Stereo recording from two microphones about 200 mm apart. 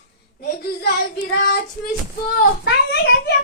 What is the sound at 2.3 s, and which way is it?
Speech, 55° left (ahead or behind).